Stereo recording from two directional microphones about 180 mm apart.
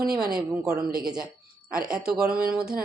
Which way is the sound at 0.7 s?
55° right (ahead or behind).